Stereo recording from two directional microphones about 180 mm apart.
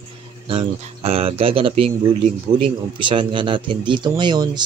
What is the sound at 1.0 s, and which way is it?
Speech, 35° right (ahead or behind).